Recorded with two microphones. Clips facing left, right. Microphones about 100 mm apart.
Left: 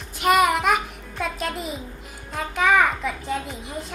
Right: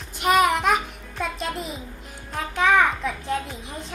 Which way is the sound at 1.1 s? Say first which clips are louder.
Left 1 dB; centre (ahead or behind).